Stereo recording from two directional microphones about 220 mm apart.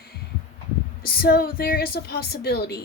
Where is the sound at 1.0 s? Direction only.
40° left (ahead or behind).